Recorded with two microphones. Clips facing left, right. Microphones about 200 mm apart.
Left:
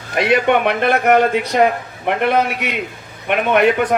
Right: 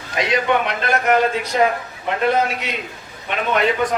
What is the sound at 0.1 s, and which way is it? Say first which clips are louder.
A man's voice: left 4 dB; 60° left (ahead or behind).